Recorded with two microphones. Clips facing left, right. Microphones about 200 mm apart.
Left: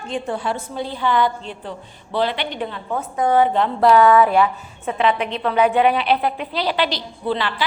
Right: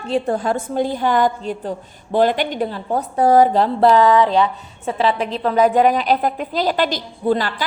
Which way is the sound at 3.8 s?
20° right (ahead or behind).